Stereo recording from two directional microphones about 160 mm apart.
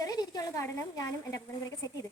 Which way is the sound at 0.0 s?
25° left (ahead or behind).